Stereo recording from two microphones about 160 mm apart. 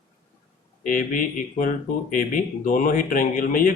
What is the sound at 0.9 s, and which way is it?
Speech, 60° left (ahead or behind).